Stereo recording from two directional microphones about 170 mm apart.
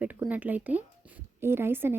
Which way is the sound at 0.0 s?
10° right (ahead or behind).